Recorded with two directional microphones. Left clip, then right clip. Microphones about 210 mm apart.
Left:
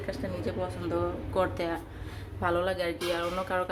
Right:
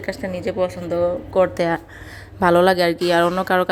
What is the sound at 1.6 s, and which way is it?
A woman's voice, 40° right (ahead or behind).